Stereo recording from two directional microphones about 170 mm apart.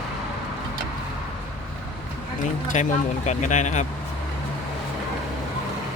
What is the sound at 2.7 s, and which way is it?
Speech, 45° left (ahead or behind).